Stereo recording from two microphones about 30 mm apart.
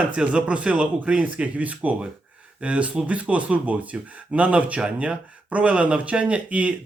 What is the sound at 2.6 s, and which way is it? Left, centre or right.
Speech, right.